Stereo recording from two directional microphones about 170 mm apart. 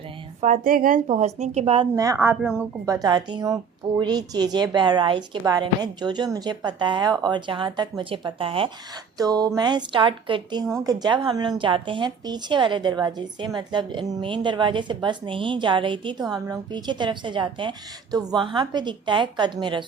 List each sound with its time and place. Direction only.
0.4 s speech: 50° right (ahead or behind)
1.0 s a woman's voice: 40° right (ahead or behind)
2.0 s speech: 15° right (ahead or behind)
2.4 s speech: 5° right (ahead or behind)
2.8 s a woman's voice: 20° right (ahead or behind)